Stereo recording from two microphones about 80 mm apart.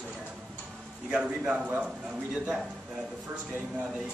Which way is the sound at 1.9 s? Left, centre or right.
Centre.